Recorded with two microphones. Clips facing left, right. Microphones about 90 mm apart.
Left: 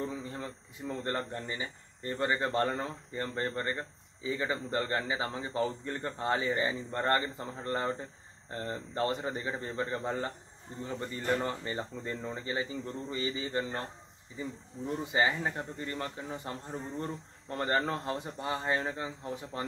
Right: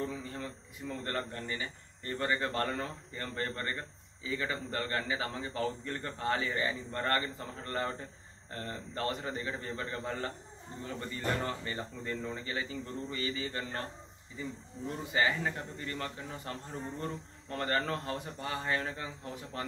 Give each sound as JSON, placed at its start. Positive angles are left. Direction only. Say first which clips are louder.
{"t": 0.0, "sound": "speech", "louder": "left 1 dB", "side_deg": 20}